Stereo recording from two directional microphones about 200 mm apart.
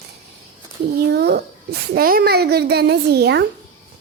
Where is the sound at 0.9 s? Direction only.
55° right (ahead or behind).